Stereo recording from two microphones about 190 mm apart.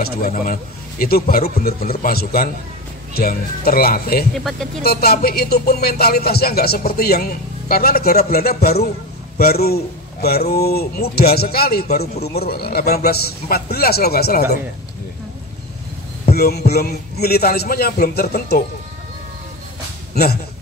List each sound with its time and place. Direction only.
0.0 s a man's voice: 50° left (ahead or behind)
4.3 s speech: centre (ahead or behind)
4.8 s speech: 55° left (ahead or behind)
16.3 s speech: 55° left (ahead or behind)